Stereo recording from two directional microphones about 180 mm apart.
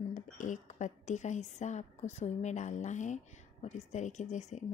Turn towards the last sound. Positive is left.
turn(degrees=40)  # may be behind; listen again after turning